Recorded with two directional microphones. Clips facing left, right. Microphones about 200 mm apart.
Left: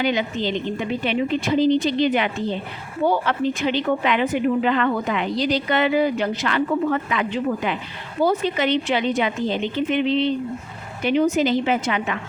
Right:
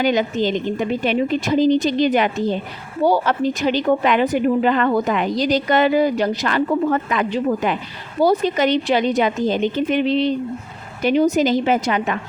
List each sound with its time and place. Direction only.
0.0 s a woman's voice: 45° right (ahead or behind)